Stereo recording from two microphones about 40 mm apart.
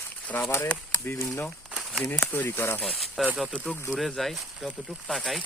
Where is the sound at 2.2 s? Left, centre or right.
Left.